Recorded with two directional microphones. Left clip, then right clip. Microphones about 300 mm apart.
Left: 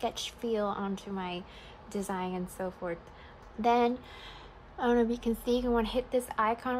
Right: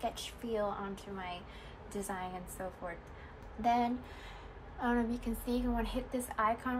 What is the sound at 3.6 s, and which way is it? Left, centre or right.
A woman's voice, left.